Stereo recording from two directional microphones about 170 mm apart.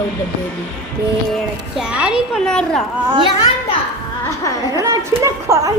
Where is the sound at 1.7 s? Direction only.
5° right (ahead or behind).